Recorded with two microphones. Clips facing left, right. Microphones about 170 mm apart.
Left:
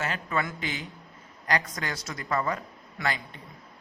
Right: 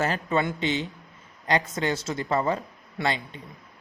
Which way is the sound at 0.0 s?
30° right (ahead or behind).